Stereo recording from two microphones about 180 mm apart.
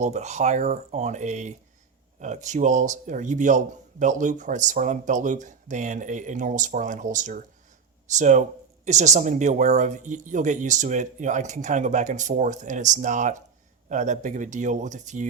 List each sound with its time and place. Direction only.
0.0 s speech: 40° right (ahead or behind)